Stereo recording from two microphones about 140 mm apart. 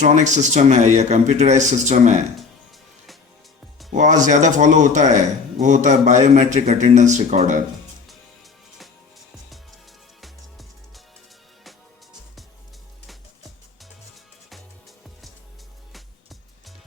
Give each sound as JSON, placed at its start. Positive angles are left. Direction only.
{"t": 0.0, "sound": "a man's voice", "side_deg": -55}
{"t": 3.9, "sound": "a man's voice", "side_deg": -60}
{"t": 10.2, "sound": "music", "side_deg": 0}
{"t": 14.5, "sound": "music", "side_deg": 0}